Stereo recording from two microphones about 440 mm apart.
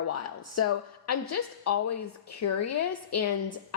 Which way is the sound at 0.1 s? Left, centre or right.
Left.